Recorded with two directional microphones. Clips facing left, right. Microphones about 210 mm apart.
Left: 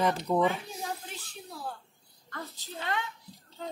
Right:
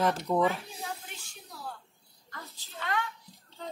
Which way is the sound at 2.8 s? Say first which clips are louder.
Right 1 dB; 25° left (ahead or behind).